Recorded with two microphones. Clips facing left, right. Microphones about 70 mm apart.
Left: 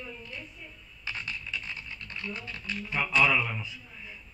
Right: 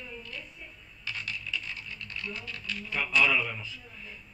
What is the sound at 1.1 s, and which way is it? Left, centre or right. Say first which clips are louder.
Dog: even; left.